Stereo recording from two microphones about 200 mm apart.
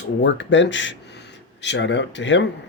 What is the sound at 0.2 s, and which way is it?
Speech, 65° left (ahead or behind).